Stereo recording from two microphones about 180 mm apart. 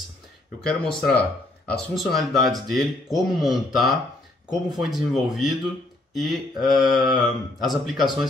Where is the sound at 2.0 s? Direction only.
Centre (ahead or behind).